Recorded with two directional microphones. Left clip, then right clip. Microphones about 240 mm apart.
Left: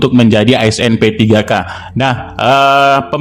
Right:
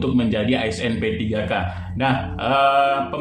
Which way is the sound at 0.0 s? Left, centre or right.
Left.